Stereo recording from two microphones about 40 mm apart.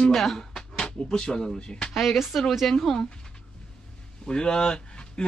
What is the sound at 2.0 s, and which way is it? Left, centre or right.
Speech, centre.